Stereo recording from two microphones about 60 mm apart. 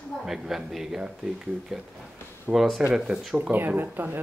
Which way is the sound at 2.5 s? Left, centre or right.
Centre.